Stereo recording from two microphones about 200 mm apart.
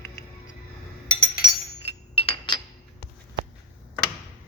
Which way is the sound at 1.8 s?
30° left (ahead or behind).